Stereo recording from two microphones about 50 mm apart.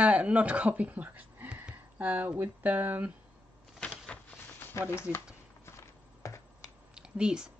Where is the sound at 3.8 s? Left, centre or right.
Left.